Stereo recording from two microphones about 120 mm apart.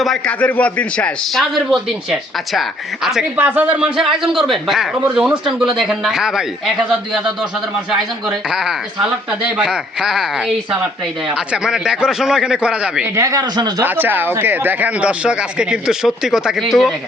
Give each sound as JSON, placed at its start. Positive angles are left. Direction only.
{"t": 0.3, "sound": "a man's voice", "side_deg": 15}
{"t": 3.3, "sound": "a man's voice", "side_deg": -15}
{"t": 8.4, "sound": "a man's voice", "side_deg": -5}
{"t": 13.1, "sound": "speech", "side_deg": -30}
{"t": 13.8, "sound": "speech", "side_deg": -15}